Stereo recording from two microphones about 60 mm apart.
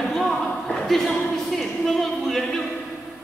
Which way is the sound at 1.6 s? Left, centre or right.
Centre.